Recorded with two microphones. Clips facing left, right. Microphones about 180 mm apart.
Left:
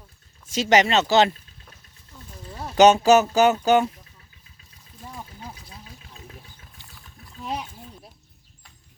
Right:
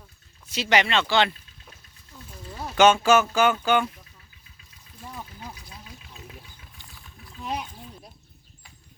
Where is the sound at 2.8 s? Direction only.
40° left (ahead or behind).